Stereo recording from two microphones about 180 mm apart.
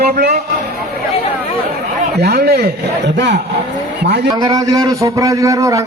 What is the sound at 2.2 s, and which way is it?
A man's voice, 60° right (ahead or behind).